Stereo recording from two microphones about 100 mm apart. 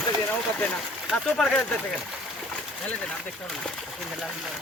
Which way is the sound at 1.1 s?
5° left (ahead or behind).